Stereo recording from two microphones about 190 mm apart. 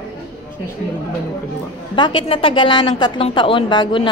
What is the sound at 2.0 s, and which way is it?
A woman's voice, 25° left (ahead or behind).